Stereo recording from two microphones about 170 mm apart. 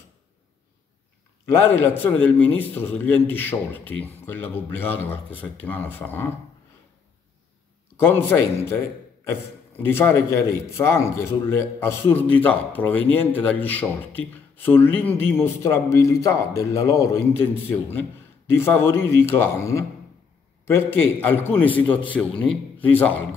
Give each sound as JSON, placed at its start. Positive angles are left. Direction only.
{"t": 1.5, "sound": "a man's voice", "side_deg": 15}
{"t": 8.0, "sound": "a man's voice", "side_deg": 10}
{"t": 18.6, "sound": "a man's voice", "side_deg": 15}